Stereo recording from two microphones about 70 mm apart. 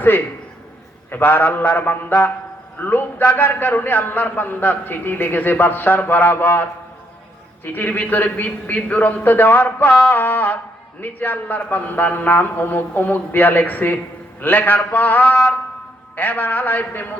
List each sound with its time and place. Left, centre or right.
1.1 s a man's voice: left